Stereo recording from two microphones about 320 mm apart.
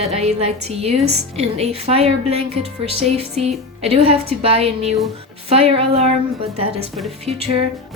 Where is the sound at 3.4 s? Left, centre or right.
Centre.